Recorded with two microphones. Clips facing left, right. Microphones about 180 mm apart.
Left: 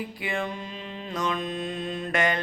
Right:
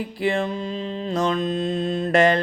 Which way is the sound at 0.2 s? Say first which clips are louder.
Right 10 dB; 30° right (ahead or behind).